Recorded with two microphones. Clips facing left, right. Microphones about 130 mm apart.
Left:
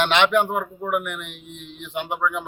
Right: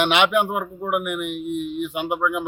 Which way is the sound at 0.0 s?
10° right (ahead or behind).